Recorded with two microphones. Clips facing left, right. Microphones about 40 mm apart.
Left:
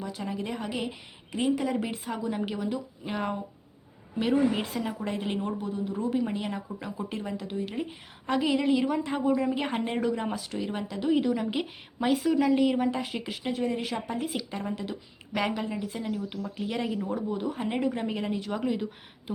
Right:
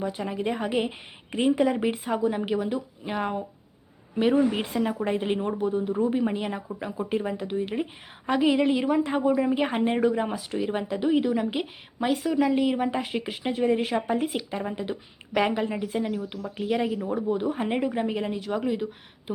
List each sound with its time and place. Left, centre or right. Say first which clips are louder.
0.0 s a woman's voice: right 5 dB; right
1.7 s a woman's voice: right 5 dB; centre
12.9 s a woman's voice: right 3 dB; centre